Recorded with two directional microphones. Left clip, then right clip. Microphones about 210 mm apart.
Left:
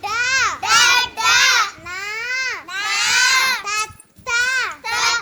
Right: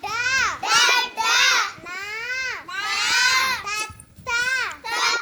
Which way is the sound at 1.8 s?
45° left (ahead or behind).